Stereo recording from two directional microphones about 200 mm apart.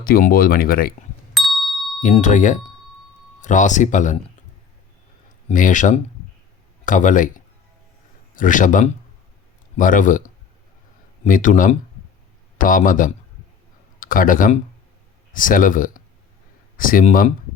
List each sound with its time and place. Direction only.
0.0 s speech: 45° left (ahead or behind)
1.3 s ding: centre (ahead or behind)
2.0 s speech: 35° left (ahead or behind)
5.5 s speech: 40° left (ahead or behind)